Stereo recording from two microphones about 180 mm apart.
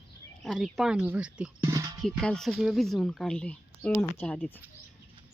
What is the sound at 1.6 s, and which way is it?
Music, 20° right (ahead or behind).